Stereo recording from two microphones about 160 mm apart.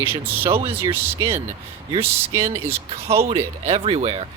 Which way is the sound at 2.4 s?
40° right (ahead or behind).